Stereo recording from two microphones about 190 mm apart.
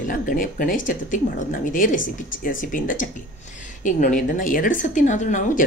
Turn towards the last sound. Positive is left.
turn(degrees=40)  # may be behind; listen again after turning